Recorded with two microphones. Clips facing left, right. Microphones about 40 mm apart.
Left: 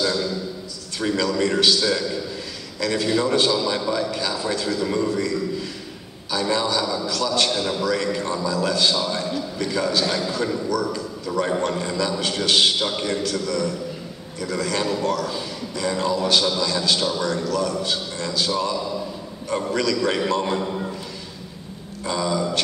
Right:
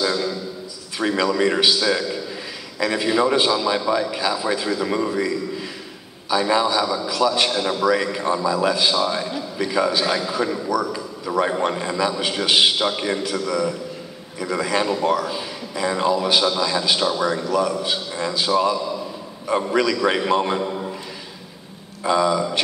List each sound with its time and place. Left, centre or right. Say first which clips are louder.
0.0 s a sound: right 1 dB; centre
0.9 s a man's voice: right 2 dB; centre
22.0 s a man's voice: right 5 dB; centre